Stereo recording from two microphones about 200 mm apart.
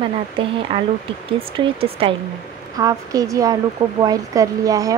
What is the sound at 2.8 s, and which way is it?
Speech, 15° right (ahead or behind).